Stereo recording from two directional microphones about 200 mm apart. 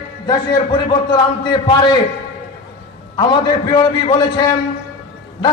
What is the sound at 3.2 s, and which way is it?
A man's voice, 25° left (ahead or behind).